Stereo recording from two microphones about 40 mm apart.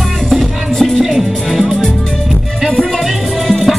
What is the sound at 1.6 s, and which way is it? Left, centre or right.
Music, centre.